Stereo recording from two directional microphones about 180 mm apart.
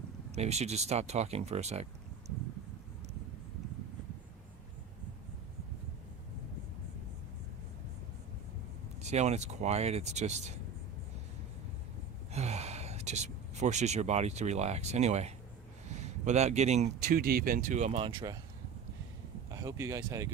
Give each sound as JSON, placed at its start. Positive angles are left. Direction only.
{"t": 0.3, "sound": "speech", "side_deg": -35}
{"t": 9.0, "sound": "speech", "side_deg": -40}
{"t": 12.3, "sound": "speech", "side_deg": -35}
{"t": 17.1, "sound": "speech", "side_deg": -55}
{"t": 18.0, "sound": "speech", "side_deg": -25}
{"t": 19.5, "sound": "speech", "side_deg": -15}